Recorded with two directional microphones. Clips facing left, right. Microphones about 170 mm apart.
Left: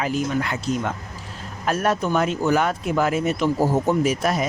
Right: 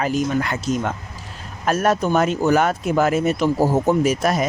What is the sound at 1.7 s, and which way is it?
Speech, 40° right (ahead or behind).